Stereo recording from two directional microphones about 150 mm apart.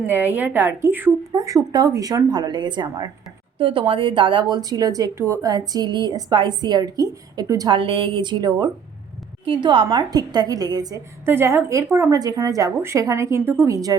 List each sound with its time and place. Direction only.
0.0 s a woman's voice: 10° right (ahead or behind)
7.8 s a woman's voice: 35° right (ahead or behind)